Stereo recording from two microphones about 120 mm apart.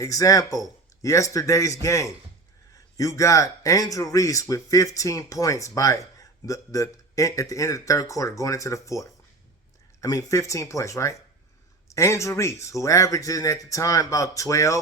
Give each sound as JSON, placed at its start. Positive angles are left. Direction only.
{"t": 0.0, "sound": "a man's voice", "side_deg": 30}